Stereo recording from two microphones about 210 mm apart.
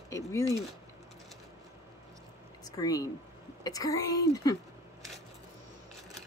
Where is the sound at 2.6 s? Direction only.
15° left (ahead or behind).